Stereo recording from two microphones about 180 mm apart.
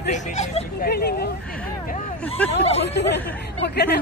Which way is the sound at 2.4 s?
10° left (ahead or behind).